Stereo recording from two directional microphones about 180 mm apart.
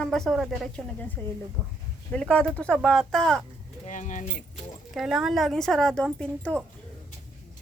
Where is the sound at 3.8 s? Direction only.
45° left (ahead or behind).